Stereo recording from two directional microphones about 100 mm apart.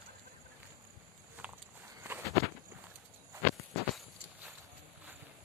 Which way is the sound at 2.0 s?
20° right (ahead or behind).